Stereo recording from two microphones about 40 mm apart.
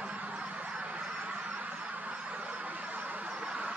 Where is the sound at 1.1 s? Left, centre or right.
Right.